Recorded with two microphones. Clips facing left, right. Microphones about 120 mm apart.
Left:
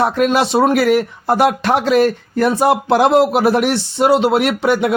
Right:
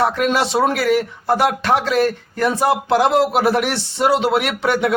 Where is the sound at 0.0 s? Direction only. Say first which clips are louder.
Left 3 dB; 50° left (ahead or behind).